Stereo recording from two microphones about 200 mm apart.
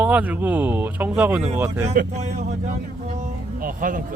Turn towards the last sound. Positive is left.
turn(degrees=-40)  # may be behind; listen again after turning